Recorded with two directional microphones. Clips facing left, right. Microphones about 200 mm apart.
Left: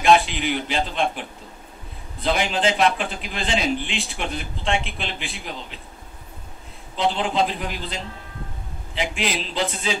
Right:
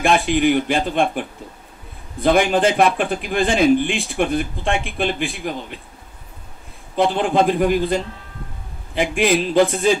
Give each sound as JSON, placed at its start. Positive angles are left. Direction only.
{"t": 0.0, "sound": "a man's voice", "side_deg": -50}
{"t": 2.2, "sound": "a man's voice", "side_deg": -55}
{"t": 7.0, "sound": "a man's voice", "side_deg": -50}